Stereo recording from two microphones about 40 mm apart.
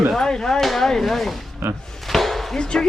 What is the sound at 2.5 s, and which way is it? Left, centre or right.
Speech, centre.